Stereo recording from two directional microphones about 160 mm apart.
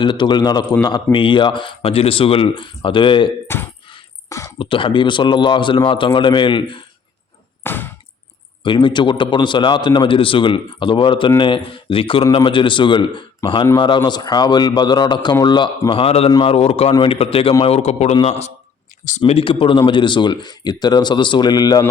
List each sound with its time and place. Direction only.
0.0 s a man's voice: 30° left (ahead or behind)
3.4 s speech: 15° left (ahead or behind)
4.4 s a man's voice: 35° left (ahead or behind)
7.6 s a sound: 15° left (ahead or behind)
8.6 s a man's voice: 30° left (ahead or behind)